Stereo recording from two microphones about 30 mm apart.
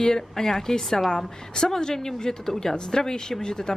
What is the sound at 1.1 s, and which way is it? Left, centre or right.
Speech, left.